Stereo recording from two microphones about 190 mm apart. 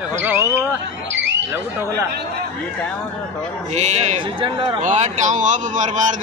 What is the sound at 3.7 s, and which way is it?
A man's voice, 35° right (ahead or behind).